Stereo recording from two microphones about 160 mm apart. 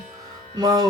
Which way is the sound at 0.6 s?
25° right (ahead or behind).